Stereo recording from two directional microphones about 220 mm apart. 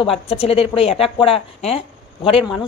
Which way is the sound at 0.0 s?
25° left (ahead or behind).